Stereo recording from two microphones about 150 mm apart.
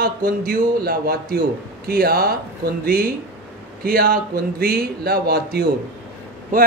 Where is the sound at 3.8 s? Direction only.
75° right (ahead or behind); by 5.7 s 90° right.